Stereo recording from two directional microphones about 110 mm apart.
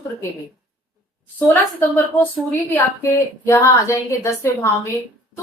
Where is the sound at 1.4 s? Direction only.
20° left (ahead or behind).